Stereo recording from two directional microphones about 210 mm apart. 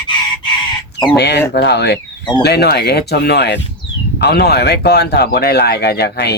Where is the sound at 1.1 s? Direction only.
50° left (ahead or behind).